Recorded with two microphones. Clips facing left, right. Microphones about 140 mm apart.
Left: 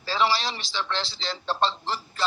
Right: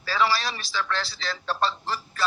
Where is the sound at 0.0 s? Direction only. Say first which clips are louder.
Even; 25° left (ahead or behind).